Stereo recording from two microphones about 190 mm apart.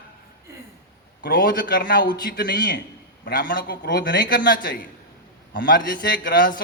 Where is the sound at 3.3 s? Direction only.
50° left (ahead or behind).